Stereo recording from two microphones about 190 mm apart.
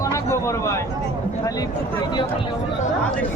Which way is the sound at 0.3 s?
15° left (ahead or behind).